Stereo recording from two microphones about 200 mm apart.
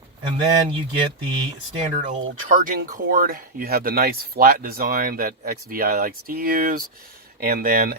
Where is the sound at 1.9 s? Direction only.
40° right (ahead or behind).